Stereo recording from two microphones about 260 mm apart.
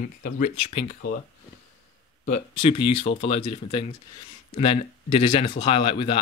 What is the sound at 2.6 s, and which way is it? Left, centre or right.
Speech, centre.